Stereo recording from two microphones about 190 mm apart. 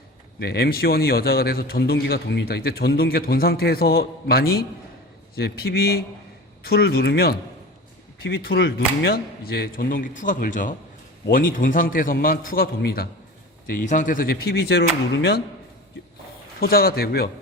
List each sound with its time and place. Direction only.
0.3 s a man's voice: 55° left (ahead or behind)
16.6 s a man's voice: 50° left (ahead or behind)